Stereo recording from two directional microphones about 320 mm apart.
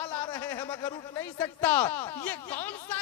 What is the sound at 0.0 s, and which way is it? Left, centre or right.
A man's voice, centre.